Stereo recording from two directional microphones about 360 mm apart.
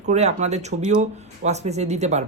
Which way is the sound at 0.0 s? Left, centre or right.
Centre.